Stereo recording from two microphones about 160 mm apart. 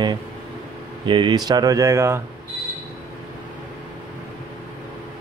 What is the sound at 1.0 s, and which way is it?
Speech, 30° right (ahead or behind).